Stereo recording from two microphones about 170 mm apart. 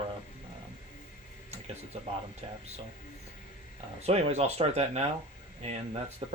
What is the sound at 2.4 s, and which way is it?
Speech, 30° right (ahead or behind).